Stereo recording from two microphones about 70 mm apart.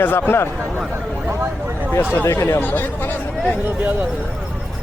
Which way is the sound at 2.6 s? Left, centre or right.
Left.